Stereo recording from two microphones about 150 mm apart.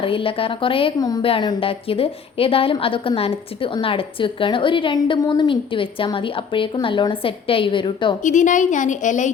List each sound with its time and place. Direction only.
0.0 s a woman's voice: 35° left (ahead or behind)
8.2 s a woman's voice: 55° left (ahead or behind)